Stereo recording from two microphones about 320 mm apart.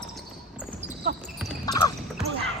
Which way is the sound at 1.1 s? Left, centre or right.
Right.